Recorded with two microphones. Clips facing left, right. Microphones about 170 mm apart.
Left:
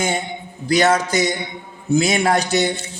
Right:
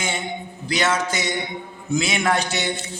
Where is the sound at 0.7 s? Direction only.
40° left (ahead or behind).